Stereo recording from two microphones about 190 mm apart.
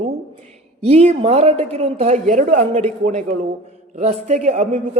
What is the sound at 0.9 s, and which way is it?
A man's voice, 35° right (ahead or behind).